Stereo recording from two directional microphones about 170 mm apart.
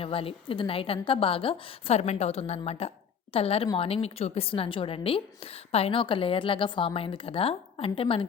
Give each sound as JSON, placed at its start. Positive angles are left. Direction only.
{"t": 0.0, "sound": "a woman's voice", "side_deg": 35}